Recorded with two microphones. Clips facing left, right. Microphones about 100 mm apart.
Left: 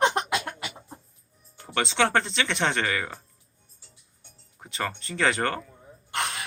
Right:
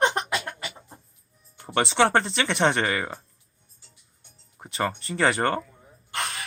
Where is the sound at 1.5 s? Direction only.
15° right (ahead or behind).